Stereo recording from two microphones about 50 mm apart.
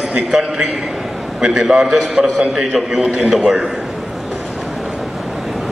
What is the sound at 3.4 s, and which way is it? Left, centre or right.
Speech, centre.